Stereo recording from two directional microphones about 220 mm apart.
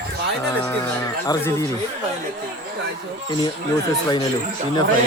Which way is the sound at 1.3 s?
15° left (ahead or behind).